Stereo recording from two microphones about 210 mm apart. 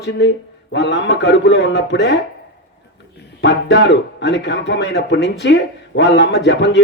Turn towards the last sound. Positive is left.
turn(degrees=55)  # may be behind; listen again after turning